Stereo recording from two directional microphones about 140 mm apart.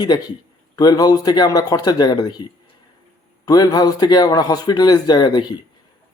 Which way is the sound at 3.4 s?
25° left (ahead or behind).